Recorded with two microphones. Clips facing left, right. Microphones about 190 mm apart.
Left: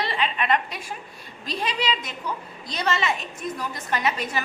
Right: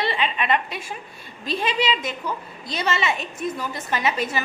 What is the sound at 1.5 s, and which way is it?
A woman's voice, centre (ahead or behind).